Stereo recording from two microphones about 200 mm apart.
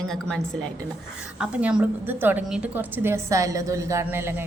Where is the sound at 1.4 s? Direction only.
5° right (ahead or behind).